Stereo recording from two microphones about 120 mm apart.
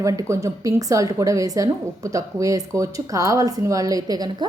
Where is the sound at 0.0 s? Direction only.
25° right (ahead or behind).